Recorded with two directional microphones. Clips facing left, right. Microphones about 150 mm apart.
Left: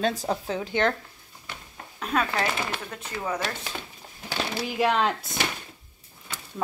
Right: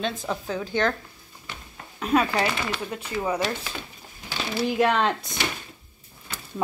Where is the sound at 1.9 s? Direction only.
5° right (ahead or behind).